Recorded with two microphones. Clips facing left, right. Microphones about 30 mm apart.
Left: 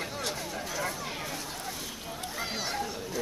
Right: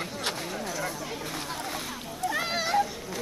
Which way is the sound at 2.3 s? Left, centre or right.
Right.